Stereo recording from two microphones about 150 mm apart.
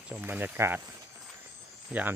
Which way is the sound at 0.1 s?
10° right (ahead or behind).